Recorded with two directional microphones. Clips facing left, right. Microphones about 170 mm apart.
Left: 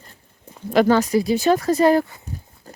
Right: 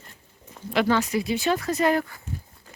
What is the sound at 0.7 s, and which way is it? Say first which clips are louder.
Speech: left 6 dB; 40° left (ahead or behind).